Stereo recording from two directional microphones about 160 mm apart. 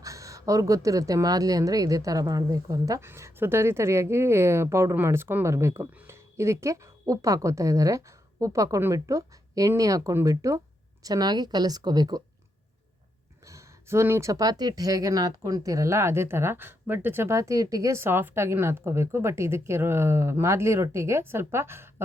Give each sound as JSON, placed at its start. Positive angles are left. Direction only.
{"t": 0.0, "sound": "speech", "side_deg": -20}
{"t": 13.4, "sound": "speech", "side_deg": -20}